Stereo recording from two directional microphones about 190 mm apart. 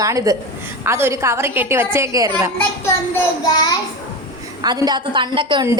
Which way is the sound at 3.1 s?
20° left (ahead or behind).